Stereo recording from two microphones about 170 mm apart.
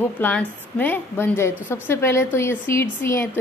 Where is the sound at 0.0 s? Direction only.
10° left (ahead or behind).